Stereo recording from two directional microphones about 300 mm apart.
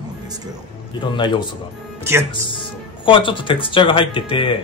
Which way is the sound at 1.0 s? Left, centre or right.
Centre.